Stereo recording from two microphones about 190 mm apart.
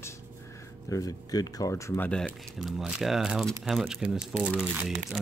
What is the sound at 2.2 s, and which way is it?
Speech, centre (ahead or behind).